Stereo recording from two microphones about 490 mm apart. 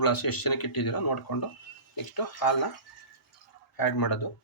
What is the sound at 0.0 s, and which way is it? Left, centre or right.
Speech, left.